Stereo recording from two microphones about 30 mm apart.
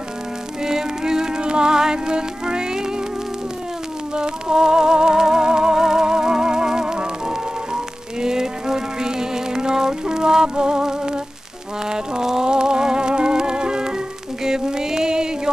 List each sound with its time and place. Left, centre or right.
0.7 s music: centre
4.1 s music: right